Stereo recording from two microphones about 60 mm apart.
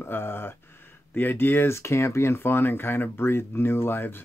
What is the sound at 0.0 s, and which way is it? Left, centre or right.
Speech, left.